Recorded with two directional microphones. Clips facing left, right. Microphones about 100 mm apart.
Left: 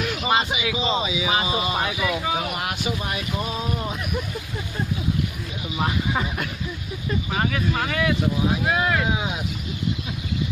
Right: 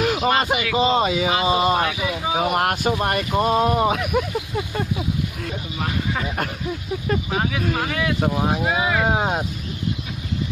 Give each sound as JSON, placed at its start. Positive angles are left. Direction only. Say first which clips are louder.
{"t": 0.0, "sound": "a sound", "louder": "right 7 dB", "side_deg": -50}
{"t": 0.4, "sound": "speech", "louder": "right 5 dB", "side_deg": -55}
{"t": 7.3, "sound": "speech", "louder": "left 2 dB", "side_deg": -5}
{"t": 9.0, "sound": "speech", "louder": "right 5 dB", "side_deg": -50}